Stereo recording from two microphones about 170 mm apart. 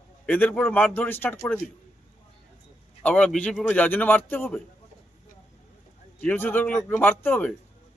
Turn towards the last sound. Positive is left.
turn(degrees=5)  # may be behind; listen again after turning